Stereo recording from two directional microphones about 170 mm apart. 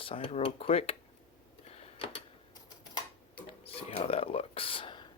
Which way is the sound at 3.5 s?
35° left (ahead or behind).